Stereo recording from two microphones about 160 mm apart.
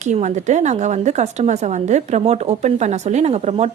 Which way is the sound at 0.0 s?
50° right (ahead or behind).